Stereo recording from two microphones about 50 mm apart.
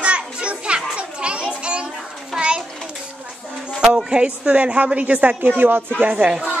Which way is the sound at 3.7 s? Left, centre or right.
Centre.